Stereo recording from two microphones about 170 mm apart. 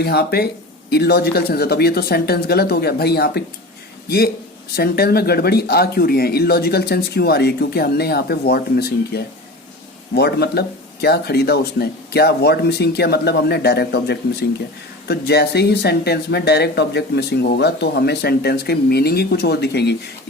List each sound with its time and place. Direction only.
0.0 s speech: 65° left (ahead or behind)
4.8 s speech: 65° left (ahead or behind)